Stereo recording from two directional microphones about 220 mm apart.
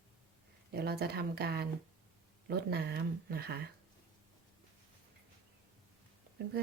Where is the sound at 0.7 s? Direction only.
45° right (ahead or behind).